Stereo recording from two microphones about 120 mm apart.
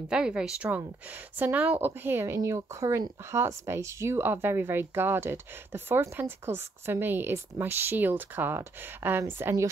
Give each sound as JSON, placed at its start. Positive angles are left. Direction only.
{"t": 0.1, "sound": "speech", "side_deg": -5}